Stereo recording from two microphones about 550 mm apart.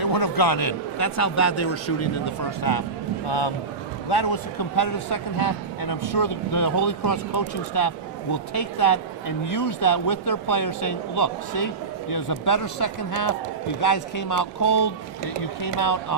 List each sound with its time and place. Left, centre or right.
0.0 s speech: left
2.6 s speech: left
3.2 s a man's voice: left